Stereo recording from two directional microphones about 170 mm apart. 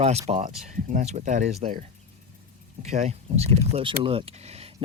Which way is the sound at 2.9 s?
40° right (ahead or behind).